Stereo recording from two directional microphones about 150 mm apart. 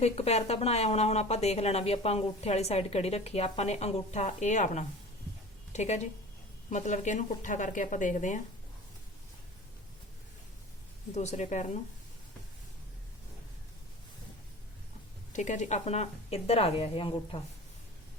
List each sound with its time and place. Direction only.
0.0 s speech: 45° left (ahead or behind)
11.1 s speech: 50° left (ahead or behind)
15.3 s speech: 55° left (ahead or behind); by 17.4 s 35° left (ahead or behind)